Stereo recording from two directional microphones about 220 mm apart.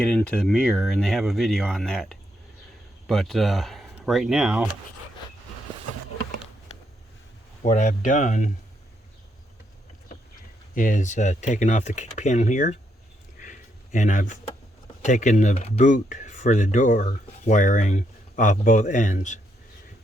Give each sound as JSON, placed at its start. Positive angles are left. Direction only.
{"t": 0.0, "sound": "speech", "side_deg": 5}
{"t": 7.6, "sound": "speech", "side_deg": 30}
{"t": 10.8, "sound": "speech", "side_deg": 35}
{"t": 13.4, "sound": "a sound", "side_deg": 35}
{"t": 15.0, "sound": "speech", "side_deg": 35}